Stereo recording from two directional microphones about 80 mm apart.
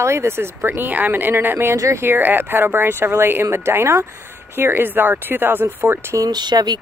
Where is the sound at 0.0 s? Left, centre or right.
Right.